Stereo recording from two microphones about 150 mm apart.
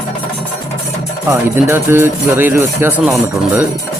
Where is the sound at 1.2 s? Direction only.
15° right (ahead or behind).